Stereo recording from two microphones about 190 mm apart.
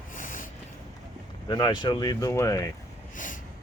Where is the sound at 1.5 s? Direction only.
25° left (ahead or behind).